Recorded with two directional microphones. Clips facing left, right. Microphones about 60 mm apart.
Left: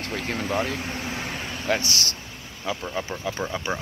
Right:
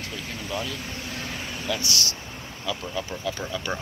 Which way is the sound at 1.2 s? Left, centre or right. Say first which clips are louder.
Left 2 dB; centre.